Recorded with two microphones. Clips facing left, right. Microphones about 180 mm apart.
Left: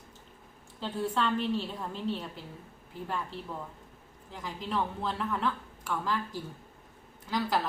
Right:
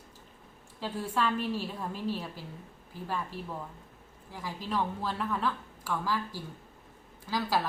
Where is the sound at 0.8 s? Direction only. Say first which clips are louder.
Left 1 dB; 10° right (ahead or behind).